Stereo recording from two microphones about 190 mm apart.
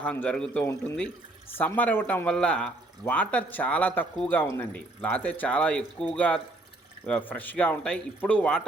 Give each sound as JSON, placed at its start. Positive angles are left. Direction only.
{"t": 0.0, "sound": "speech", "side_deg": 10}